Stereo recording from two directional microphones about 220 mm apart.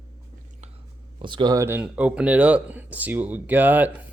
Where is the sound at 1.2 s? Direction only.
20° right (ahead or behind).